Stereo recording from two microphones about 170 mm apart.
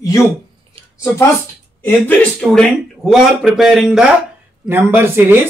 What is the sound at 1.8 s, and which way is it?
A man's voice, 10° left (ahead or behind).